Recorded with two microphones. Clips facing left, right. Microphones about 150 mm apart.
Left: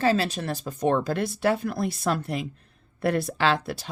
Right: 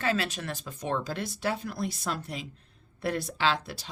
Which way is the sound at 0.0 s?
35° left (ahead or behind).